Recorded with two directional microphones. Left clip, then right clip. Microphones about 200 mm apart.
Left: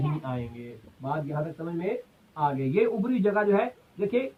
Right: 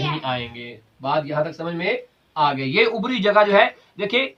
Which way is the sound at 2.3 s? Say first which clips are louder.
Right 8 dB; 10° right (ahead or behind).